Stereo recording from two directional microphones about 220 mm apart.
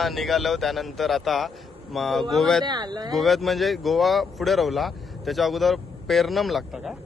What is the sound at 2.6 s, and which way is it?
Speech, 20° right (ahead or behind).